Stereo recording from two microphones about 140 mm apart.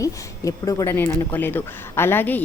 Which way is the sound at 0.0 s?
25° left (ahead or behind).